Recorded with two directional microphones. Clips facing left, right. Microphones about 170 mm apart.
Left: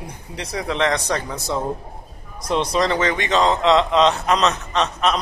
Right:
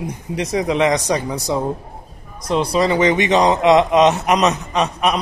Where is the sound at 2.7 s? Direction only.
5° right (ahead or behind).